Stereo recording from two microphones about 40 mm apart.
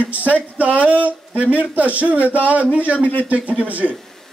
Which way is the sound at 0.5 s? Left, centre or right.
Right.